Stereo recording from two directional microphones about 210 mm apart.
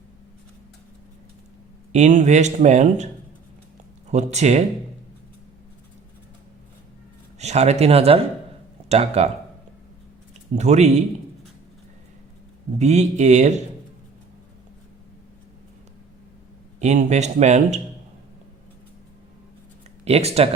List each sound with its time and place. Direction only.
1.9 s speech: 35° right (ahead or behind)
4.1 s speech: 30° right (ahead or behind)
7.3 s speech: 30° right (ahead or behind)
10.5 s speech: 35° right (ahead or behind)
12.8 s speech: 35° right (ahead or behind)
16.8 s speech: 35° right (ahead or behind)
20.1 s speech: 30° right (ahead or behind)